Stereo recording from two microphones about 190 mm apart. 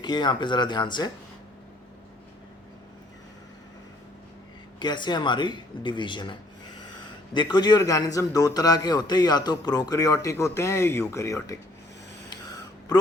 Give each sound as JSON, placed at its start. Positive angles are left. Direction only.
{"t": 0.0, "sound": "a man's voice", "side_deg": 25}
{"t": 4.8, "sound": "a man's voice", "side_deg": 25}
{"t": 7.3, "sound": "a man's voice", "side_deg": 20}